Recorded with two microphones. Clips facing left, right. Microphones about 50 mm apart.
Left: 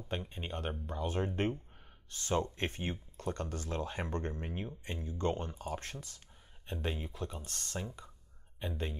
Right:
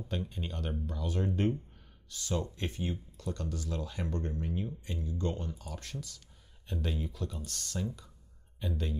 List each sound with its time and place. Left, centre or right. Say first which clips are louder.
0.1 s speech: even; left